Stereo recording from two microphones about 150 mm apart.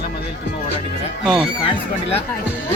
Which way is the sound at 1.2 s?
5° right (ahead or behind).